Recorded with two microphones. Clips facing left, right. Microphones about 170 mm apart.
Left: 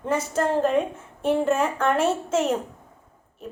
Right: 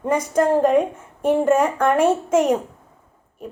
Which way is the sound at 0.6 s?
10° right (ahead or behind).